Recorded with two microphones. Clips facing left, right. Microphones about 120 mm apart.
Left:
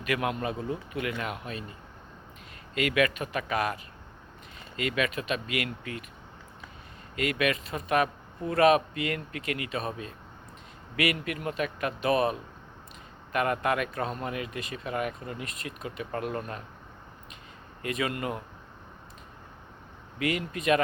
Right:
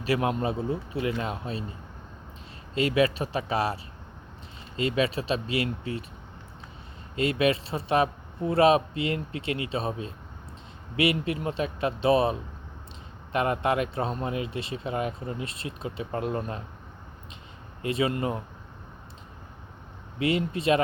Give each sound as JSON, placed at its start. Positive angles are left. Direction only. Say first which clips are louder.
{"t": 0.0, "sound": "speech", "louder": "right 3 dB", "side_deg": -30}
{"t": 2.7, "sound": "speech", "louder": "right 3 dB", "side_deg": -30}
{"t": 4.8, "sound": "speech", "louder": "right 3 dB", "side_deg": -30}
{"t": 7.2, "sound": "speech", "louder": "right 4 dB", "side_deg": -30}
{"t": 17.8, "sound": "speech", "louder": "right 4 dB", "side_deg": -30}
{"t": 20.1, "sound": "speech", "louder": "right 4 dB", "side_deg": -30}